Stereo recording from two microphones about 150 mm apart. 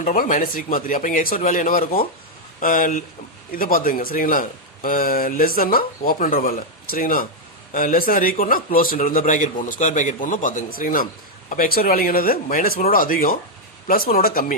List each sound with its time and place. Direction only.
0.0 s speech: 65° left (ahead or behind)